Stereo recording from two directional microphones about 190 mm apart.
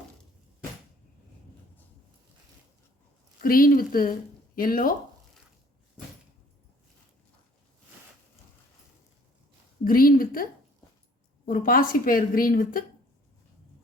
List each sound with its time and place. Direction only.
3.4 s a woman's voice: 50° left (ahead or behind)
9.8 s a woman's voice: 50° left (ahead or behind)